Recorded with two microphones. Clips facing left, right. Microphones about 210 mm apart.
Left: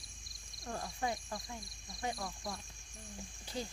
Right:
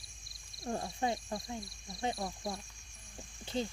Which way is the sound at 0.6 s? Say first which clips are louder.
Right 4 dB; 25° right (ahead or behind).